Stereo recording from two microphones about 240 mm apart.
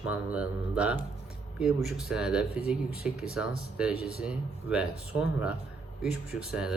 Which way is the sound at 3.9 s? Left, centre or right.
Left.